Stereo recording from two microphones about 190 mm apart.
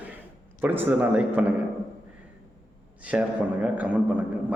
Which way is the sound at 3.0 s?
5° right (ahead or behind).